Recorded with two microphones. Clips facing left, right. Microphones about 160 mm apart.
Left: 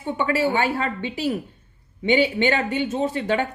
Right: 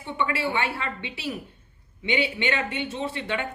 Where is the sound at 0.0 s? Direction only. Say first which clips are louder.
Left 5 dB; 40° left (ahead or behind).